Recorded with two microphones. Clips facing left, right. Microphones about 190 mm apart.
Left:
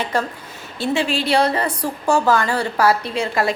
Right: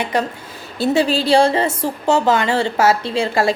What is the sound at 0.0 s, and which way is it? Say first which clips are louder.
Speech: right 2 dB; 15° right (ahead or behind).